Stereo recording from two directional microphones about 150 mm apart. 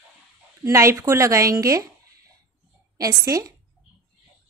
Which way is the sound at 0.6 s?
20° right (ahead or behind).